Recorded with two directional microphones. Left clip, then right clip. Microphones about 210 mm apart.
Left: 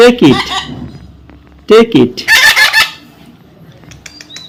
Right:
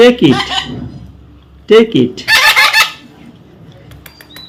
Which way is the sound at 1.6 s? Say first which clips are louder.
Left 2 dB; 25° left (ahead or behind).